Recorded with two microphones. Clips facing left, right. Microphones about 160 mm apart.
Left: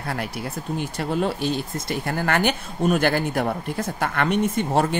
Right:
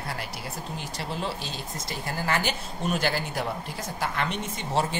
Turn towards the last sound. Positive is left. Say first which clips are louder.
# left 8 dB
turn(degrees=55)  # may be behind; listen again after turning